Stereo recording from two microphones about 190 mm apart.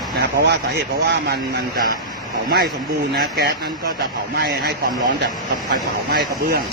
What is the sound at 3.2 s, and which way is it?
Speech, 55° right (ahead or behind).